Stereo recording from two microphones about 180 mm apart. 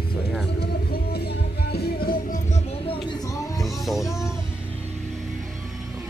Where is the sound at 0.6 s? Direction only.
65° left (ahead or behind); by 2.6 s 50° left (ahead or behind).